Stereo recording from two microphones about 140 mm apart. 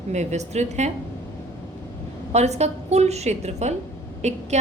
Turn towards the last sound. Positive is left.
turn(degrees=-55)  # may be behind; listen again after turning